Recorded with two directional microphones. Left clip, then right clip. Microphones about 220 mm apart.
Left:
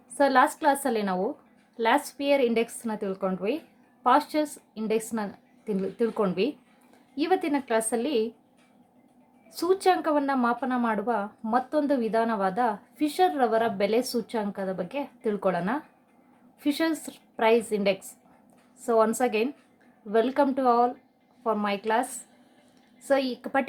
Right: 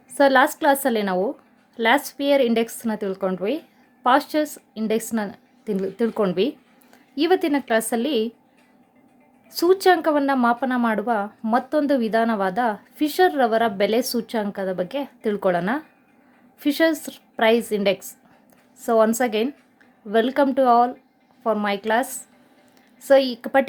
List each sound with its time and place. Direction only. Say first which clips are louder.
0.2 s speech: right 5 dB; 25° right (ahead or behind)
9.5 s speech: right 6 dB; 25° right (ahead or behind)